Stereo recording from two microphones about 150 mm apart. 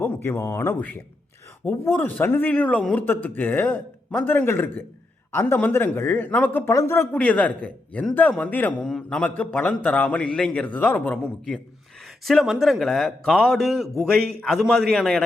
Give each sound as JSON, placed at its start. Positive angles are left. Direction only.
{"t": 0.0, "sound": "a man's voice", "side_deg": 15}